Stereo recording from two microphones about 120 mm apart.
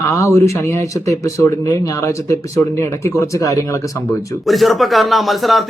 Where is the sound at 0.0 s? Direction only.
25° left (ahead or behind).